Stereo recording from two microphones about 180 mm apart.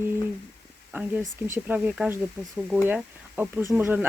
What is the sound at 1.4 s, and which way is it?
Speech, 10° right (ahead or behind).